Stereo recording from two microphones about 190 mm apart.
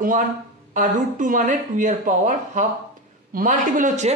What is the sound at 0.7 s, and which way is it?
A man's voice, 45° right (ahead or behind).